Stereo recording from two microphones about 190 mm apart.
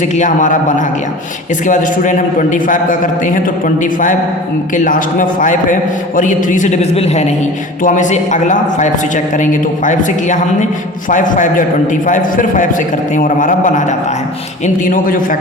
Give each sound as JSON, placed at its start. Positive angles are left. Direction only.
{"t": 0.0, "sound": "a man's voice", "side_deg": 40}